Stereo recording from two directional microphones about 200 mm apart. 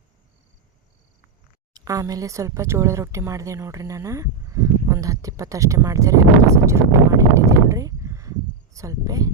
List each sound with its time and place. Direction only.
1.7 s speech: 20° right (ahead or behind)